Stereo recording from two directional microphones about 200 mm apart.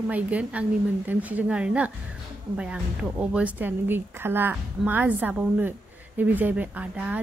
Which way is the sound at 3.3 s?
10° right (ahead or behind).